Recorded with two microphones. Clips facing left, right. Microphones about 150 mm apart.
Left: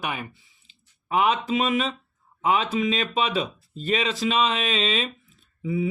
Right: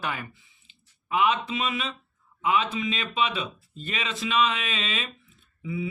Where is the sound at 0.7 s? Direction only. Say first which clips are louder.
Left 2 dB; 35° left (ahead or behind).